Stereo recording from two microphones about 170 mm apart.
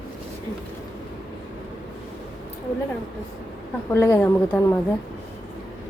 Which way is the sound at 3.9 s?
15° left (ahead or behind).